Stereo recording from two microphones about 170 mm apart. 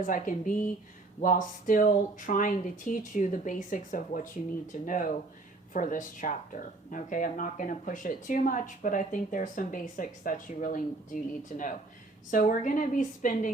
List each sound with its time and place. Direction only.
0.0 s speech: 50° left (ahead or behind)